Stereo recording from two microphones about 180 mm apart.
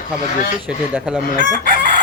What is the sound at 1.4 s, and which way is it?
Chicken, 50° right (ahead or behind).